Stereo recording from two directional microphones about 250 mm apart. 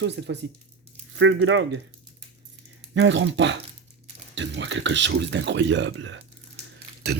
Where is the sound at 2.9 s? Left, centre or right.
Right.